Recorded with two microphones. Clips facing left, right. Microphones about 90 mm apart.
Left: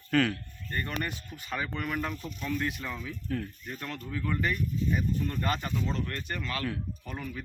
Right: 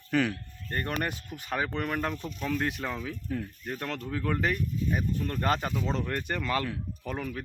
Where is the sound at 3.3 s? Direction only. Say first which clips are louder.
Left 1 dB; 5° right (ahead or behind).